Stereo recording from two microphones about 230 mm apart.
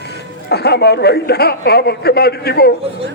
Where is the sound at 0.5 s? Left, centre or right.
Left.